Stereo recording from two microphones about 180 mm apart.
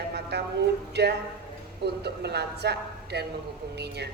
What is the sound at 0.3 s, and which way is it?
A woman's voice, 65° right (ahead or behind).